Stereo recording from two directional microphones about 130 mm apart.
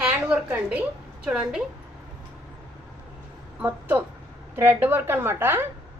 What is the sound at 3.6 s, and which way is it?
A woman's voice, 15° right (ahead or behind).